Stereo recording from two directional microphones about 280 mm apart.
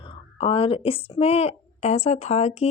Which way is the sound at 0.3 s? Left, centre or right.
Centre.